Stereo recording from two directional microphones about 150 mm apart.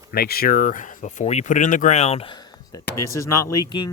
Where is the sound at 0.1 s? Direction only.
90° left; by 2.4 s 40° left (ahead or behind).